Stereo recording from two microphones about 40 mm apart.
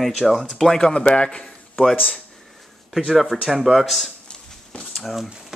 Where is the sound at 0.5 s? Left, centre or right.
Centre.